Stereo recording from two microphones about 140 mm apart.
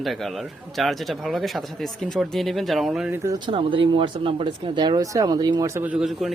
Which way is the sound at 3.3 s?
35° right (ahead or behind).